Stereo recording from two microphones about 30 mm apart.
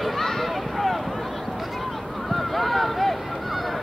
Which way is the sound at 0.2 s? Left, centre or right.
Centre.